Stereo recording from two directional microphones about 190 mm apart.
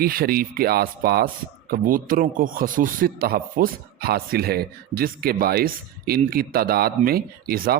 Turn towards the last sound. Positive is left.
turn(degrees=-55)  # may be behind; listen again after turning